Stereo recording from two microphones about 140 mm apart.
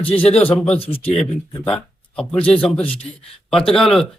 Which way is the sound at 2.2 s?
10° left (ahead or behind).